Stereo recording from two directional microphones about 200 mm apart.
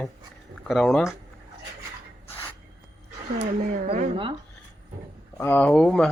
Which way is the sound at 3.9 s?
30° right (ahead or behind).